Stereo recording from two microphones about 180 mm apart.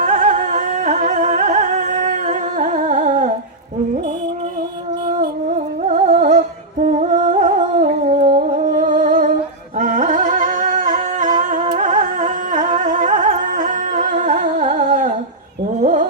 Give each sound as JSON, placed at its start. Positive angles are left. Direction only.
{"t": 0.0, "sound": "music", "side_deg": -45}
{"t": 5.9, "sound": "music", "side_deg": -40}
{"t": 9.7, "sound": "singing", "side_deg": -40}
{"t": 15.8, "sound": "fowl", "side_deg": -45}